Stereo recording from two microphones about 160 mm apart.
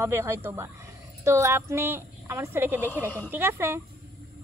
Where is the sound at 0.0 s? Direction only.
15° right (ahead or behind).